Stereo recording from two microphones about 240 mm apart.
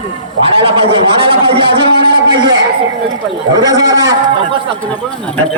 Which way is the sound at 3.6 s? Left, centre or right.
Centre.